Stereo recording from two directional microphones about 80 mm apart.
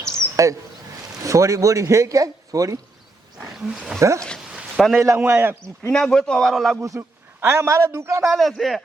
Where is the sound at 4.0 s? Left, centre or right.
Right.